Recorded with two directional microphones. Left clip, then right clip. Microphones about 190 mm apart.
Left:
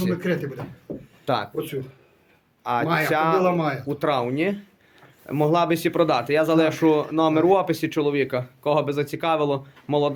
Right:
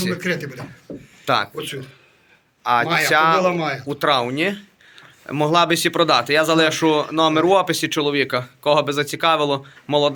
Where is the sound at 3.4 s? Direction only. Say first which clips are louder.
Right 2 dB; 60° left (ahead or behind).